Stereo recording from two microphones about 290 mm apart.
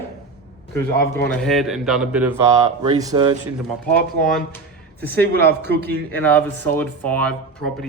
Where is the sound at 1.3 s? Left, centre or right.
Centre.